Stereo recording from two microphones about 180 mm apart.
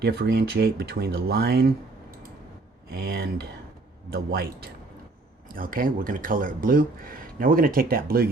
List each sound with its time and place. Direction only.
0.0 s speech: 60° right (ahead or behind)
2.9 s speech: 60° right (ahead or behind)